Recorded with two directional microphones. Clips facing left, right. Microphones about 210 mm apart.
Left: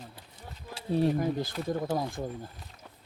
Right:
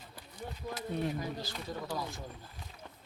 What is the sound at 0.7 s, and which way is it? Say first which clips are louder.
Speech: left 9 dB; 35° left (ahead or behind).